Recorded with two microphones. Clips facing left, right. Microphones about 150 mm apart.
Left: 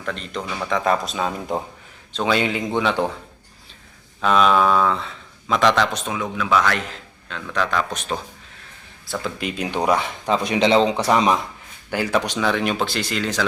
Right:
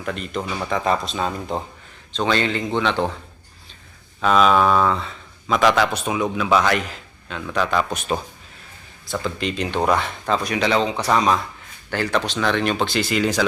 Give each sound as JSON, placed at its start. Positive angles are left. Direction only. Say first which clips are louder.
{"t": 0.0, "sound": "a man's voice", "louder": "right 2 dB", "side_deg": -10}
{"t": 4.2, "sound": "a man's voice", "louder": "right 1 dB", "side_deg": 0}
{"t": 7.3, "sound": "speech", "louder": "right 2 dB", "side_deg": -10}
{"t": 9.0, "sound": "speech", "louder": "right 2 dB", "side_deg": 0}
{"t": 11.1, "sound": "a man's voice", "louder": "left 1 dB", "side_deg": 15}